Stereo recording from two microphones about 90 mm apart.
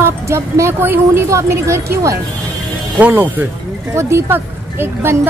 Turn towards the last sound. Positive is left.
turn(degrees=-25)  # may be behind; listen again after turning